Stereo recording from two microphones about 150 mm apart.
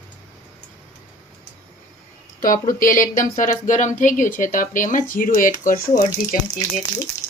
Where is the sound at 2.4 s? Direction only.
65° left (ahead or behind).